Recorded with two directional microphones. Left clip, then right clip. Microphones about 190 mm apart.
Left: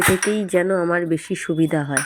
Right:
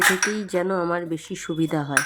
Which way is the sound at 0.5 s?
10° left (ahead or behind).